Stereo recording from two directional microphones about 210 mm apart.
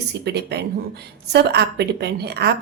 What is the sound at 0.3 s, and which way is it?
A woman's voice, 50° right (ahead or behind).